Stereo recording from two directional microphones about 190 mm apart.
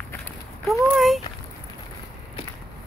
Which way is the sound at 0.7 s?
Centre (ahead or behind).